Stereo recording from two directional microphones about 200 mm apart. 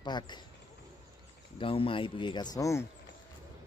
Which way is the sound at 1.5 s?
25° left (ahead or behind).